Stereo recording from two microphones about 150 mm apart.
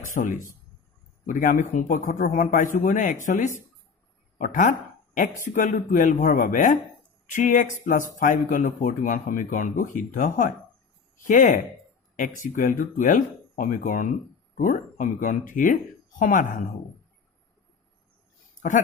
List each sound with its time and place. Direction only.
0.1 s speech: 60° left (ahead or behind)